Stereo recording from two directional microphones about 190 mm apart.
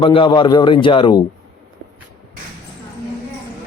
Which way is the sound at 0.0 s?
25° left (ahead or behind).